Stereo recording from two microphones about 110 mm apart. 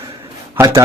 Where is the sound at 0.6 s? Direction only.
20° right (ahead or behind).